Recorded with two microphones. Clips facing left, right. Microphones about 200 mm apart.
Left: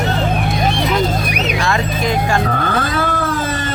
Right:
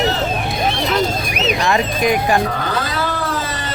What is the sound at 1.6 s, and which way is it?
Speech, 15° right (ahead or behind).